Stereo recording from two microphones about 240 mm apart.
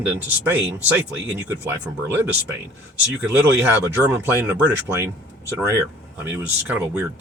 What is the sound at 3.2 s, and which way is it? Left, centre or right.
Speech, centre.